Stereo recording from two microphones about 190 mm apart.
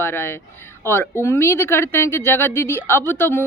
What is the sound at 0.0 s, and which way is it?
Speech, 10° left (ahead or behind).